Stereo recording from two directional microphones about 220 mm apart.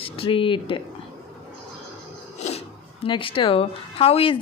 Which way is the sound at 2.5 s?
25° left (ahead or behind).